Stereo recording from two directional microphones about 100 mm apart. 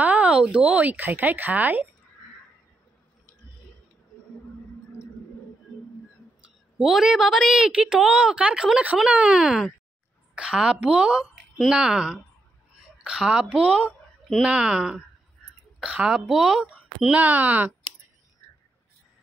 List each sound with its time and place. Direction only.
0.0 s a woman's voice: 15° right (ahead or behind)
6.4 s a woman's voice: 5° right (ahead or behind)